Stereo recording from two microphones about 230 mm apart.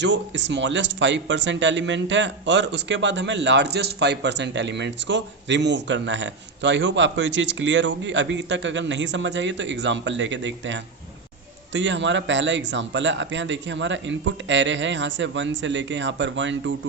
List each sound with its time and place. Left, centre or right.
0.0 s speech: right